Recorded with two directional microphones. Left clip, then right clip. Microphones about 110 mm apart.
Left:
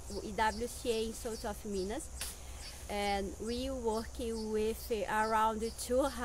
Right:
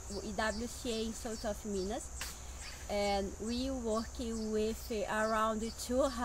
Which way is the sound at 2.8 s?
25° left (ahead or behind).